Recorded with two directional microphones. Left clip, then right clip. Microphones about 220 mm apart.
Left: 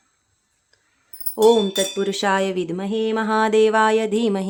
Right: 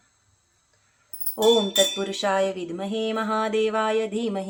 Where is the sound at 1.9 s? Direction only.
45° left (ahead or behind).